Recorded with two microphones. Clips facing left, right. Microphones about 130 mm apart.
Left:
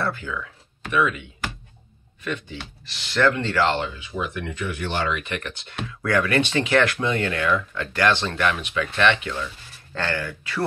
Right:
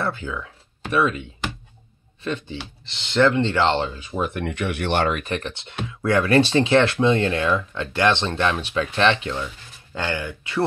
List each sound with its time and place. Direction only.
0.0 s speech: 25° right (ahead or behind)
2.2 s speech: 30° right (ahead or behind); by 5.2 s 55° right (ahead or behind)
5.2 s speech: 30° right (ahead or behind)
9.9 s speech: 15° right (ahead or behind)